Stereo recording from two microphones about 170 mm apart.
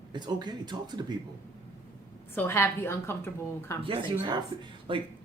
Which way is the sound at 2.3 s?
15° left (ahead or behind).